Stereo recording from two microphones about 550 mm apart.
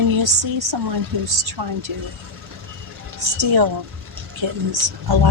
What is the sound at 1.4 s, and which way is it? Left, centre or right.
Speech, right.